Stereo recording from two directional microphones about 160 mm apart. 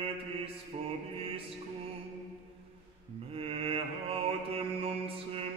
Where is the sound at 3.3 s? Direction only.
35° right (ahead or behind).